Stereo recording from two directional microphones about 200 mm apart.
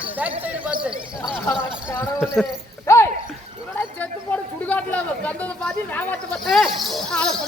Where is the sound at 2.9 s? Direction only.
15° left (ahead or behind).